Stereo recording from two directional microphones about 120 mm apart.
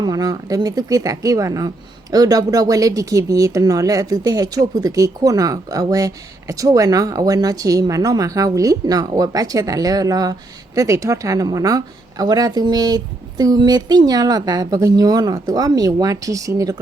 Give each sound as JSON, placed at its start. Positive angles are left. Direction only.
{"t": 0.0, "sound": "a woman's voice", "side_deg": -30}